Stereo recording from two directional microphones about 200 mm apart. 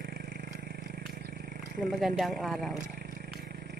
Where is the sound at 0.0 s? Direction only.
45° right (ahead or behind).